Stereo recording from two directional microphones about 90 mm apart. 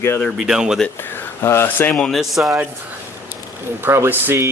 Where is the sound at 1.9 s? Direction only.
Centre (ahead or behind).